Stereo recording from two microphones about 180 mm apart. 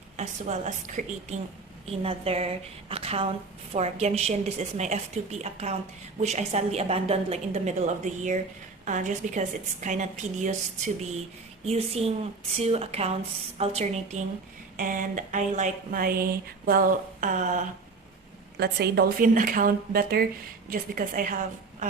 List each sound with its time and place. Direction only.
0.2 s a woman's voice: 40° right (ahead or behind)
14.8 s speech: 50° right (ahead or behind)
18.5 s speech: 65° right (ahead or behind); by 21.3 s 50° right (ahead or behind)